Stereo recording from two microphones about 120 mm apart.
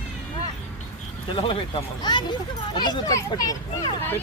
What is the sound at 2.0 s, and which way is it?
Speech, 40° left (ahead or behind).